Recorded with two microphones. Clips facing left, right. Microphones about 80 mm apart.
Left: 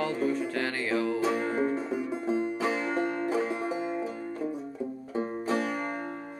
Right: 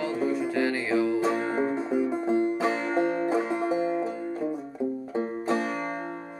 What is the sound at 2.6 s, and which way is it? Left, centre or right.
Music, right.